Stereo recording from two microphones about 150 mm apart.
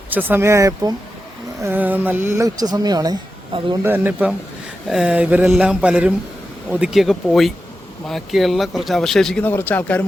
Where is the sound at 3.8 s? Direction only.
15° right (ahead or behind).